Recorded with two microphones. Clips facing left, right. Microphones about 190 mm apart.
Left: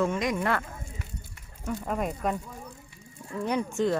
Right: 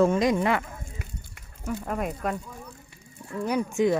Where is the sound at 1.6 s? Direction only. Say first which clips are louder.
Even; centre (ahead or behind).